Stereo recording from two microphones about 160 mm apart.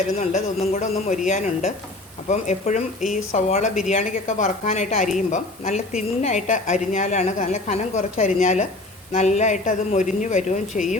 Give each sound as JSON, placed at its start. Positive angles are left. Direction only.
{"t": 0.2, "sound": "speech", "side_deg": 45}